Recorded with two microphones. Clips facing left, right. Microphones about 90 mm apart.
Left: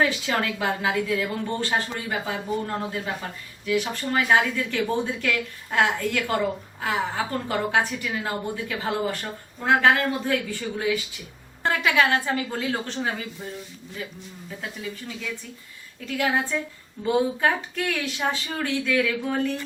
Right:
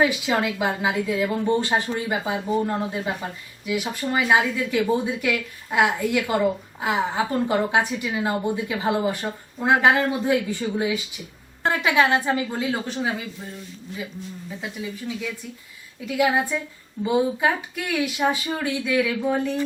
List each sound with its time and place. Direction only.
0.0 s a woman's voice: 15° right (ahead or behind)
14.6 s a woman's voice: 10° right (ahead or behind)